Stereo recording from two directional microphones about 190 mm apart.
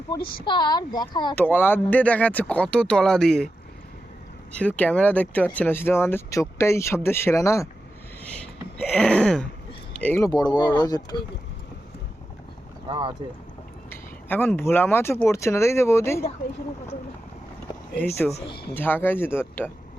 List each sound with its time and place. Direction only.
0.4 s speech: 25° left (ahead or behind)
1.4 s speech: 10° left (ahead or behind)
4.5 s speech: 5° left (ahead or behind)
12.9 s speech: 25° right (ahead or behind)
13.9 s speech: 10° left (ahead or behind)
18.3 s speech: 35° left (ahead or behind)
18.7 s speech: 10° left (ahead or behind)